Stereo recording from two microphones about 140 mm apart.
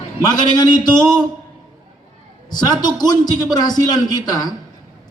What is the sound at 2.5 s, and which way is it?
A man's voice, 30° left (ahead or behind).